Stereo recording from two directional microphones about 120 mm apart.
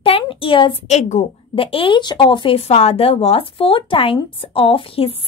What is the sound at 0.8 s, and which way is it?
Speech, 70° left (ahead or behind).